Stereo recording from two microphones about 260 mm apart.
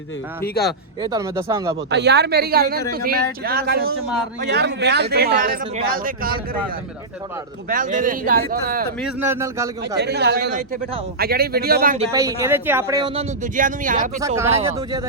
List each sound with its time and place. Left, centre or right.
1.0 s speech: centre
1.9 s speech: right
7.7 s speech: right
9.2 s speech: centre
10.0 s speech: right
12.1 s speech: centre
13.4 s speech: right
14.2 s speech: centre